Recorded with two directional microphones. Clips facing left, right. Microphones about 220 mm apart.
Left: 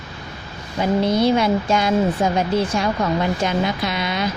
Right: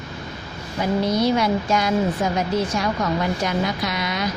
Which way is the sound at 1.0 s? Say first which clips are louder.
Left 2 dB; 25° left (ahead or behind).